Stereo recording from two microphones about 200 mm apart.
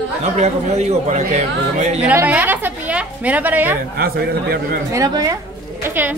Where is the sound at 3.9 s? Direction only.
50° right (ahead or behind).